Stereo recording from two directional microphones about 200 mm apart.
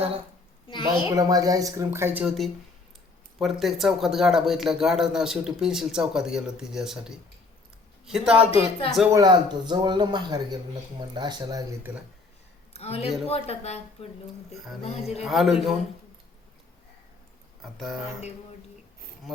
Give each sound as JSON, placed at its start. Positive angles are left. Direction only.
{"t": 1.1, "sound": "speech", "side_deg": -20}
{"t": 8.4, "sound": "speech", "side_deg": 30}
{"t": 9.0, "sound": "a man's voice", "side_deg": -15}
{"t": 12.7, "sound": "speech", "side_deg": 30}
{"t": 14.5, "sound": "speech", "side_deg": 0}
{"t": 14.8, "sound": "speech", "side_deg": 30}
{"t": 15.2, "sound": "speech", "side_deg": 0}
{"t": 17.6, "sound": "speech", "side_deg": 0}